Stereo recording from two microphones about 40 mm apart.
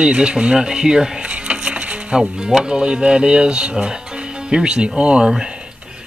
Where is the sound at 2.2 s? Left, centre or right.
Centre.